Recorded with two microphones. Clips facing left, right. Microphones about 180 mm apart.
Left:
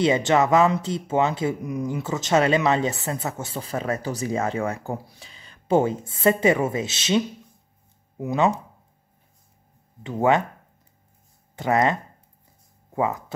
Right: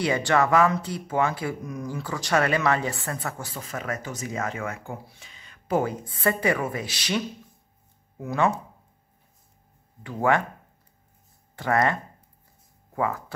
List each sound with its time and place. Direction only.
0.0 s speech: 20° left (ahead or behind)
10.0 s speech: 20° left (ahead or behind)
11.5 s speech: 20° left (ahead or behind)